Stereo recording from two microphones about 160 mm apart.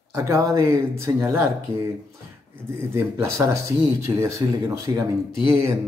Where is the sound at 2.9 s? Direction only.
20° right (ahead or behind).